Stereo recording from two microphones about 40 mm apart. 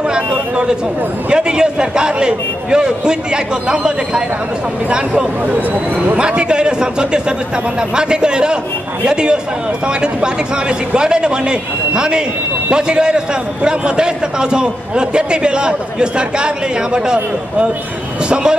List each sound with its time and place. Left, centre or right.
0.1 s a man's voice: centre
6.1 s a man's voice: right